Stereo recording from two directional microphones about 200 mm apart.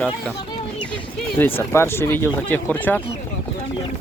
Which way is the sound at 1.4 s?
10° left (ahead or behind).